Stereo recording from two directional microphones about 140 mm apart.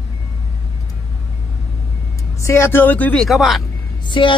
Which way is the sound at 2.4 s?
20° left (ahead or behind).